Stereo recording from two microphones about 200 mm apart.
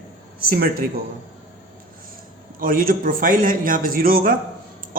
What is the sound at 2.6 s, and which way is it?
A man's voice, 45° right (ahead or behind).